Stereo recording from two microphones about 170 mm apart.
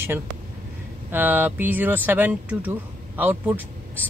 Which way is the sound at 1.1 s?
10° right (ahead or behind).